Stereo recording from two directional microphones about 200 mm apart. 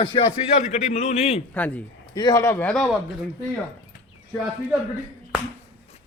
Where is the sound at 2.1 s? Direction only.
20° left (ahead or behind); by 3.0 s centre (ahead or behind).